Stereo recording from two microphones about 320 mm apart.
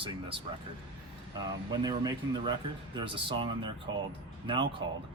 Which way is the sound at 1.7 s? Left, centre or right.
Centre.